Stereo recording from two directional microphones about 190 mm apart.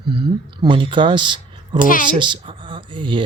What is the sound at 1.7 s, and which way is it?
Speech, 45° left (ahead or behind).